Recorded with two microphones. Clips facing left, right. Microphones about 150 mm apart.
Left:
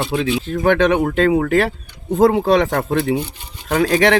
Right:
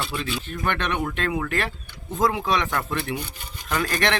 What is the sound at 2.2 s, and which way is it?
Speech, 60° left (ahead or behind).